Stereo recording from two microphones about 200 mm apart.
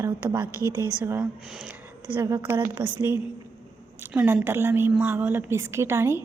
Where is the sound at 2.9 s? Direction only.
10° right (ahead or behind).